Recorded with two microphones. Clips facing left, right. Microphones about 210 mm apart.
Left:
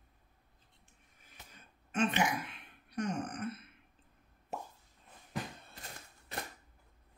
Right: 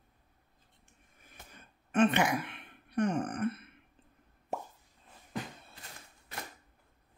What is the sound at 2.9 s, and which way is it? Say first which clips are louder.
Speech: right 6 dB; 55° right (ahead or behind).